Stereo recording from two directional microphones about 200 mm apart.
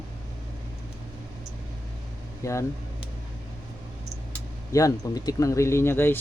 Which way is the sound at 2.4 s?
15° left (ahead or behind).